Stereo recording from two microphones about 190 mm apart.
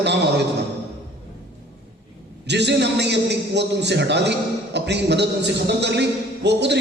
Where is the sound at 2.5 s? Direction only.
65° right (ahead or behind).